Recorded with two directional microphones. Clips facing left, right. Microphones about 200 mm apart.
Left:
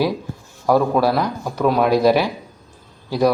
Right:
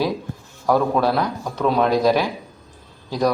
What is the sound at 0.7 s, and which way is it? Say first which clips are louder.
Speech: left 2 dB; 5° left (ahead or behind).